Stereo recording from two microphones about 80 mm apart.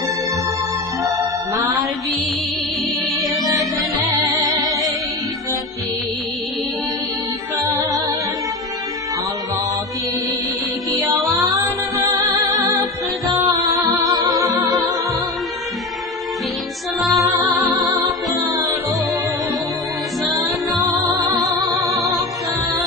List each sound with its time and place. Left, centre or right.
4.4 s music: right
7.7 s music: right
12.5 s music: right
14.0 s music: right
17.0 s music: centre
21.8 s music: right